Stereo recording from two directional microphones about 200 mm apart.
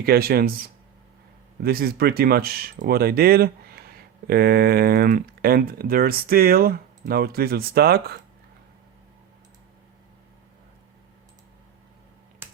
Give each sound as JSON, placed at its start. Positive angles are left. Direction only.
{"t": 0.0, "sound": "speech", "side_deg": -50}